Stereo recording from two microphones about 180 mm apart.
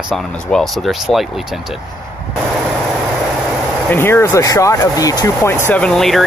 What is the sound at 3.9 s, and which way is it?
Speech, 15° left (ahead or behind).